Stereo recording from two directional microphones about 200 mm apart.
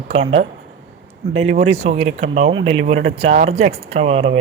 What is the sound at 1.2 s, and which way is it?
Speech, 35° right (ahead or behind).